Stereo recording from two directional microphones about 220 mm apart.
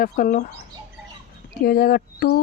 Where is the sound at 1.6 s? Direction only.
40° left (ahead or behind).